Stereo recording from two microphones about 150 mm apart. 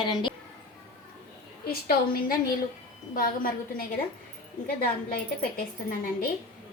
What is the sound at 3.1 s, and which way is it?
Speech, 70° left (ahead or behind).